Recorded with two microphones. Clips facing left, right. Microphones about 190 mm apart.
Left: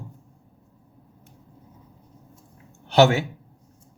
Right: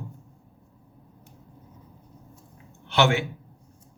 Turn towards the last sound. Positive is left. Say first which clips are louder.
# left 5 dB
turn(degrees=40)  # may be behind; listen again after turning